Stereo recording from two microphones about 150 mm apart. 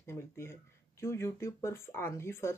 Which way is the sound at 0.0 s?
15° left (ahead or behind).